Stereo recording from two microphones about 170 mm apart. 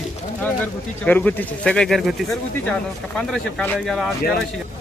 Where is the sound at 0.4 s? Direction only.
10° left (ahead or behind).